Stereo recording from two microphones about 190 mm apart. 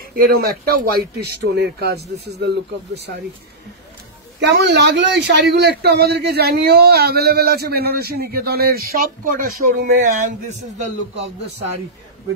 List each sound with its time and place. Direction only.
0.1 s a man's voice: 50° right (ahead or behind)
4.4 s a man's voice: 65° right (ahead or behind); by 10.9 s 40° right (ahead or behind)